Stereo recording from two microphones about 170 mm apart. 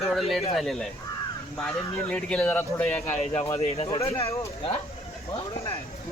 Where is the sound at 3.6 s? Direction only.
35° left (ahead or behind).